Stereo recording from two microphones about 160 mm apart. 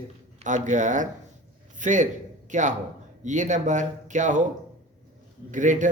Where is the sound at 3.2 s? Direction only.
50° right (ahead or behind).